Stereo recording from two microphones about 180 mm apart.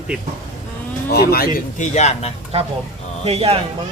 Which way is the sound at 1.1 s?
60° left (ahead or behind).